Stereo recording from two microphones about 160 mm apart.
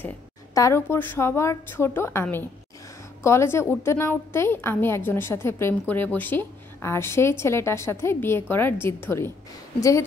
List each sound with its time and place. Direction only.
0.6 s a woman's voice: 15° left (ahead or behind)
3.3 s a woman's voice: 15° left (ahead or behind)